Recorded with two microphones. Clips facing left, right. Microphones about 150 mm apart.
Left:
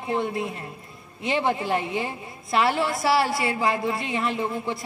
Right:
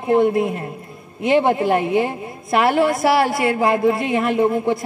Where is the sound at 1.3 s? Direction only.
45° right (ahead or behind).